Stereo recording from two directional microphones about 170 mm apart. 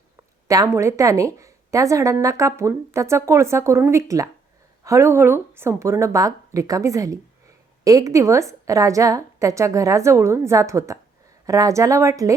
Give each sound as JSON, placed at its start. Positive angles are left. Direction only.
{"t": 0.4, "sound": "a woman's voice", "side_deg": -20}